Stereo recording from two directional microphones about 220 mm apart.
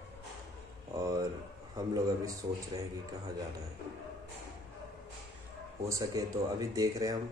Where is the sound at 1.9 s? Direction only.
15° right (ahead or behind).